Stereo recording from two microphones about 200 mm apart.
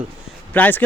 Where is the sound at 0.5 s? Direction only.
10° left (ahead or behind).